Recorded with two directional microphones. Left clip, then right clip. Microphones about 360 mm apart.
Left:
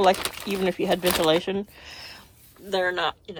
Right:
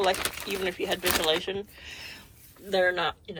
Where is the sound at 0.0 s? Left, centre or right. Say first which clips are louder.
Left 6 dB; centre.